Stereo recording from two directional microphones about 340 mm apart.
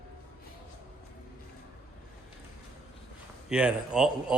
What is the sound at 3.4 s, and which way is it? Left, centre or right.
Speech, centre.